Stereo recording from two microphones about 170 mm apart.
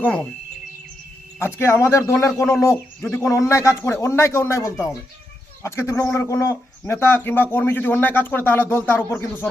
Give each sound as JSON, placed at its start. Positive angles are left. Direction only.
{"t": 0.0, "sound": "a man's voice", "side_deg": 5}
{"t": 1.4, "sound": "a man's voice", "side_deg": 15}